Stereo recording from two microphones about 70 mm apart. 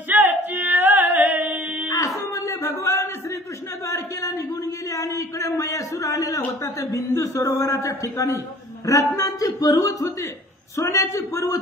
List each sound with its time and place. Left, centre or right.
0.1 s music: right
2.0 s a sound: left
8.8 s a man's voice: left